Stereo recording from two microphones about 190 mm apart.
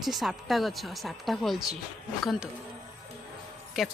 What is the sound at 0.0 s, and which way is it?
Speech, centre (ahead or behind).